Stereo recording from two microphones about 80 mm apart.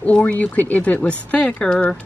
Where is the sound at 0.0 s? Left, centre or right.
Centre.